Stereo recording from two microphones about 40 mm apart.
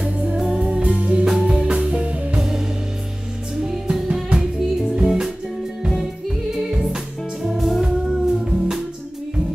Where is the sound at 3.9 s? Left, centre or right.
Right.